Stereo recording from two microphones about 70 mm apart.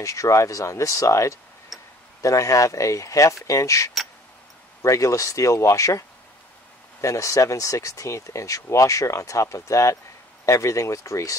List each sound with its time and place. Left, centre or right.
0.0 s speech: left
1.7 s tick-tock: centre
2.2 s speech: left